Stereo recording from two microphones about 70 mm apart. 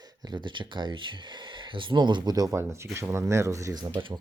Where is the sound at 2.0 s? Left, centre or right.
Right.